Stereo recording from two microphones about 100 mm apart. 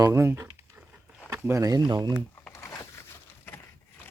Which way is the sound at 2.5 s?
30° left (ahead or behind).